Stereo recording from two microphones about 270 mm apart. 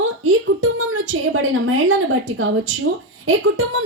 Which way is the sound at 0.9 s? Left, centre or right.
Right.